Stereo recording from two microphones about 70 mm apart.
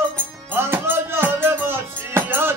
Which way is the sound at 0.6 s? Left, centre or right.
Right.